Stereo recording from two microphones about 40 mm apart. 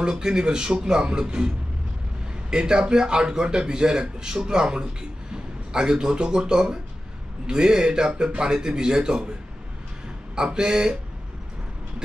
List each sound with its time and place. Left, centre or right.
0.0 s speech: centre
2.5 s a man's voice: centre
10.3 s speech: centre